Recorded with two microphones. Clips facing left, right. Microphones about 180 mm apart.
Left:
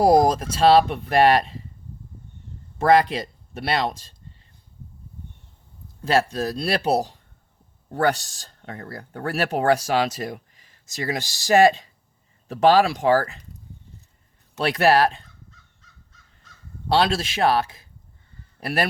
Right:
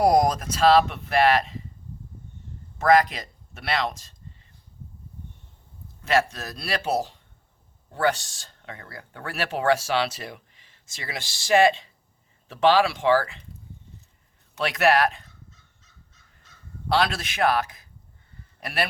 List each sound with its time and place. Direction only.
0.0 s speech: 30° left (ahead or behind)
2.7 s speech: 30° left (ahead or behind)
6.0 s speech: 35° left (ahead or behind)
14.6 s speech: 35° left (ahead or behind)
16.9 s a man's voice: 30° left (ahead or behind)
18.6 s speech: 40° left (ahead or behind)